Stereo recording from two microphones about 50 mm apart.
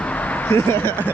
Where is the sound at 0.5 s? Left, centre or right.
Left.